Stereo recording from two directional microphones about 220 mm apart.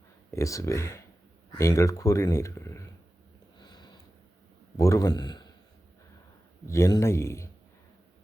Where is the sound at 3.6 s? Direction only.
20° left (ahead or behind).